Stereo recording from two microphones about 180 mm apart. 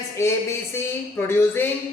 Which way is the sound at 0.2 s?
15° left (ahead or behind).